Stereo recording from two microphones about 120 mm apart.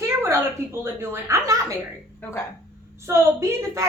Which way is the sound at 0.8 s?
20° right (ahead or behind).